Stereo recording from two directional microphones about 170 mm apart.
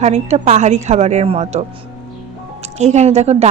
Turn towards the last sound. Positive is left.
turn(degrees=-40)  # may be behind; listen again after turning